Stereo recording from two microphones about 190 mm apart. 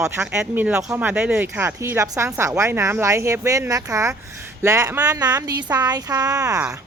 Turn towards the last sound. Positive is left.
turn(degrees=-20)  # may be behind; listen again after turning